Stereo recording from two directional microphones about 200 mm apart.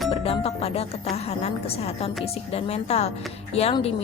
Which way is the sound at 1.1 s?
30° left (ahead or behind).